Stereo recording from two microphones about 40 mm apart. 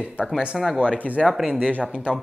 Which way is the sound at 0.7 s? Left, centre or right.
Right.